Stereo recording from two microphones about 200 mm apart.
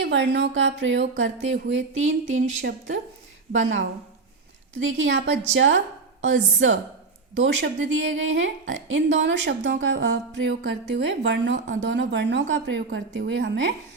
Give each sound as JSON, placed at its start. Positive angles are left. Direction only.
{"t": 0.0, "sound": "a woman's voice", "side_deg": -60}
{"t": 2.4, "sound": "a woman's voice", "side_deg": -40}
{"t": 3.5, "sound": "a woman's voice", "side_deg": -70}